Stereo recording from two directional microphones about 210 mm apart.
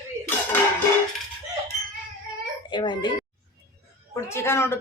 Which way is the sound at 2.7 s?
20° left (ahead or behind).